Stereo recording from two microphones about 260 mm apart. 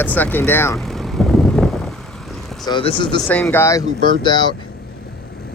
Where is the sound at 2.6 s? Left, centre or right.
Centre.